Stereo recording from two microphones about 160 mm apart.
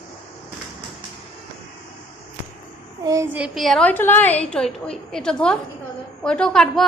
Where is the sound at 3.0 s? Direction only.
20° right (ahead or behind).